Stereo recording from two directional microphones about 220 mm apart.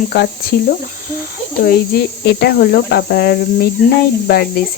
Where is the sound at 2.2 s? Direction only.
45° left (ahead or behind).